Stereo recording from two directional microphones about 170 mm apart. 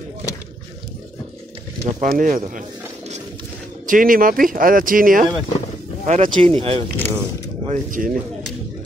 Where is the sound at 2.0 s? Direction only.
50° right (ahead or behind).